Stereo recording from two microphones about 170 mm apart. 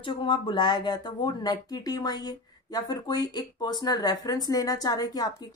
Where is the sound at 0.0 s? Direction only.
30° left (ahead or behind).